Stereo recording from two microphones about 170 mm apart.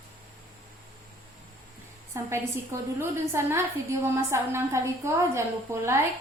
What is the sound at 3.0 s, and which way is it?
A woman's voice, 15° right (ahead or behind).